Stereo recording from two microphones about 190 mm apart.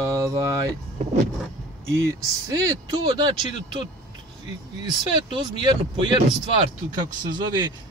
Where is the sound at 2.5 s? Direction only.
20° right (ahead or behind).